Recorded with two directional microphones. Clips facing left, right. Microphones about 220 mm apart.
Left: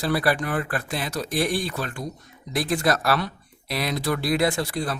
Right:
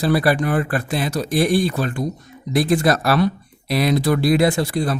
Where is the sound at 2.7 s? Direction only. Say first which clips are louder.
Right 4 dB; 30° right (ahead or behind).